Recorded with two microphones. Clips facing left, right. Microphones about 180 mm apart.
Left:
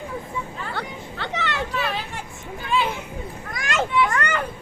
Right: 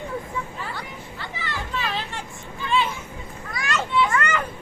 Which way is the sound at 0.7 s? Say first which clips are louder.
Left 4 dB; 65° left (ahead or behind).